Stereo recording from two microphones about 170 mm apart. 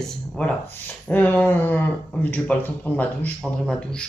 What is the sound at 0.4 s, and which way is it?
Speech, 5° left (ahead or behind).